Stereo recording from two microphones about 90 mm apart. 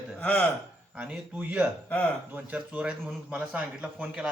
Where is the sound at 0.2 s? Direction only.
10° left (ahead or behind).